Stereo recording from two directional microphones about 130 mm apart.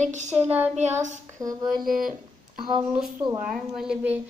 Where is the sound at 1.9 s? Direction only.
Centre (ahead or behind).